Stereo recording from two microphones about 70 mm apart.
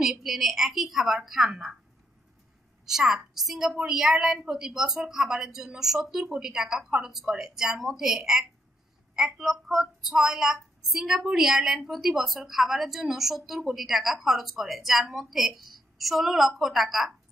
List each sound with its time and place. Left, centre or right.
0.0 s a woman's voice: centre
2.8 s a woman's voice: centre